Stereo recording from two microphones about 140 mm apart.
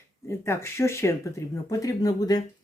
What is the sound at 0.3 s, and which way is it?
Speech, 20° left (ahead or behind).